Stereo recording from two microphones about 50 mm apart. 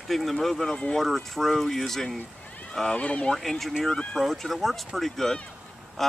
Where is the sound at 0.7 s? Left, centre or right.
Centre.